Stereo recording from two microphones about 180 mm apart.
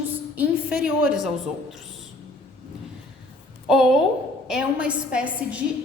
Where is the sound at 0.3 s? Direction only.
5° right (ahead or behind).